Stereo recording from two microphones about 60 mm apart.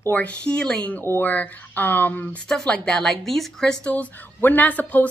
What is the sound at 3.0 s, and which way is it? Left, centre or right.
Speech, centre.